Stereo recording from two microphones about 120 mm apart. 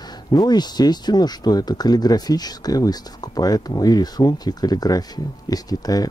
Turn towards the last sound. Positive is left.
turn(degrees=30)  # may be behind; listen again after turning